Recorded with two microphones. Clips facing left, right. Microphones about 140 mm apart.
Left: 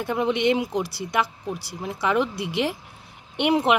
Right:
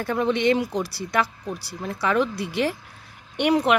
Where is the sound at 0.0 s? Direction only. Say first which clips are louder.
Right 1 dB; 15° left (ahead or behind).